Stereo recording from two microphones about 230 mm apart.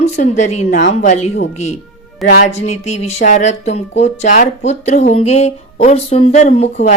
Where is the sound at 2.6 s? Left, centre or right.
Left.